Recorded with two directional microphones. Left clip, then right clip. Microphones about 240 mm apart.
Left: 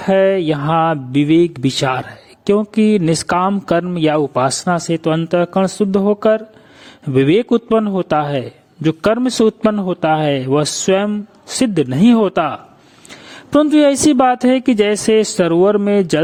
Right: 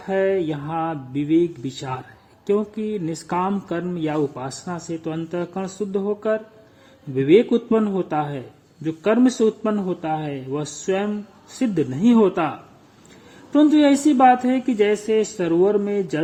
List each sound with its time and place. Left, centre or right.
0.0 s a man's voice: left